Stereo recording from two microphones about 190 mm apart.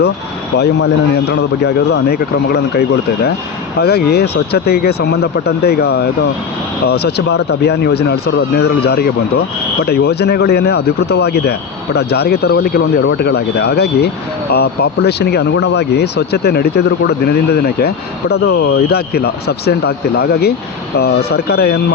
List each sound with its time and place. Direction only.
1.3 s speech: 60° left (ahead or behind)